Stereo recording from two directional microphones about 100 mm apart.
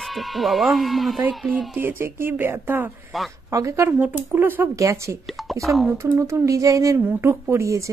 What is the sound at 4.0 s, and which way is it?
Speech, 20° right (ahead or behind).